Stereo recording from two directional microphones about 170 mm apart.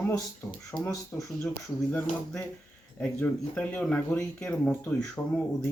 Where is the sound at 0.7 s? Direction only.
15° left (ahead or behind).